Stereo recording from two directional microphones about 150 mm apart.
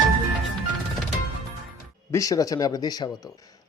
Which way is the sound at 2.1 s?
20° left (ahead or behind).